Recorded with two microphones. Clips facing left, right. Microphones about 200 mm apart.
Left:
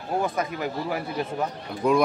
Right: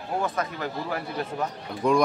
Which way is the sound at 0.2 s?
10° left (ahead or behind).